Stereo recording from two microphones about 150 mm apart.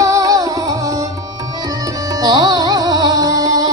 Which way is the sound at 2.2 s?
30° right (ahead or behind).